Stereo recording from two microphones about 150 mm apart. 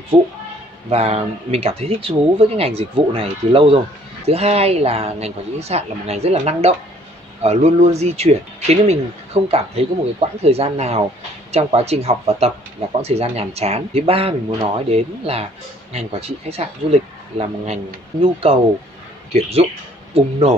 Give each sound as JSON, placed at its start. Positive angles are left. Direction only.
{"t": 0.1, "sound": "speech", "side_deg": -30}
{"t": 0.8, "sound": "speech", "side_deg": -45}
{"t": 18.2, "sound": "speech", "side_deg": -40}